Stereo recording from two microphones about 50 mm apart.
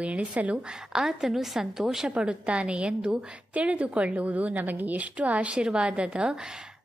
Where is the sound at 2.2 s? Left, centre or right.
Right.